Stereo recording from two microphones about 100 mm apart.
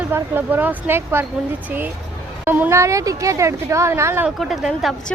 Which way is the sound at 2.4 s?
20° right (ahead or behind).